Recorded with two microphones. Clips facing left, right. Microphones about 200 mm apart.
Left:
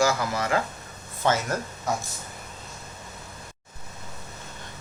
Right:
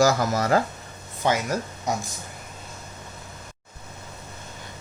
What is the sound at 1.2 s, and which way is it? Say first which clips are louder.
Speech: right 1 dB; 15° right (ahead or behind).